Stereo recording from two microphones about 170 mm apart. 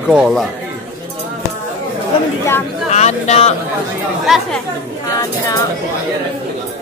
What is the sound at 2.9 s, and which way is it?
Speech, 45° left (ahead or behind).